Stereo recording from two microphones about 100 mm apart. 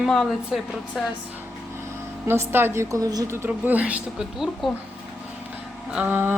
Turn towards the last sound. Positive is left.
turn(degrees=-20)  # may be behind; listen again after turning